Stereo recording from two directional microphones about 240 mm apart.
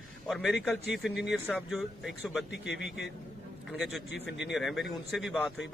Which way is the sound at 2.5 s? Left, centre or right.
Left.